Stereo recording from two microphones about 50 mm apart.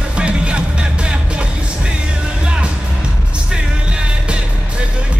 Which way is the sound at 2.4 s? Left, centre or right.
Centre.